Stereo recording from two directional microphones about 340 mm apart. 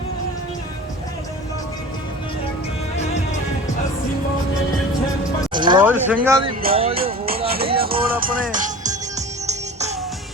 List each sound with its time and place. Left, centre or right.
5.5 s speech: centre
6.6 s music: right